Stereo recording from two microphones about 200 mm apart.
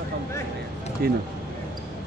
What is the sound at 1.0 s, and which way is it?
Speech, 50° right (ahead or behind).